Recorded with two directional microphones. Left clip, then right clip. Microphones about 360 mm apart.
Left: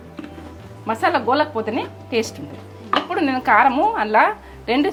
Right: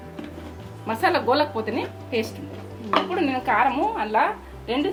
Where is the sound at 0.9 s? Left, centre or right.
Left.